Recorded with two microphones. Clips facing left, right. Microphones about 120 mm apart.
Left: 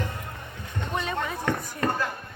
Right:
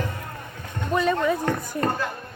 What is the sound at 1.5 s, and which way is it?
Chop, 40° right (ahead or behind).